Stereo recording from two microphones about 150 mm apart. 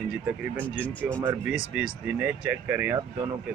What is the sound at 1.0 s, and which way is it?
Speech, 10° right (ahead or behind).